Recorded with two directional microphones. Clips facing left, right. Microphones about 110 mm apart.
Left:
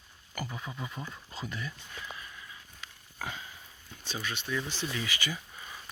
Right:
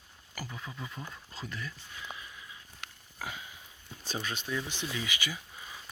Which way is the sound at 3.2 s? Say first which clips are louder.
Left 1 dB; 5° right (ahead or behind).